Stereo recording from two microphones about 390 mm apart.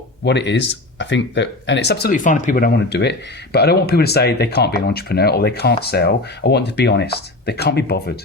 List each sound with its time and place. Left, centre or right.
0.3 s speech: left